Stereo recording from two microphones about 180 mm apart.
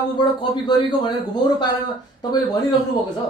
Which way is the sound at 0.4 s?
25° left (ahead or behind).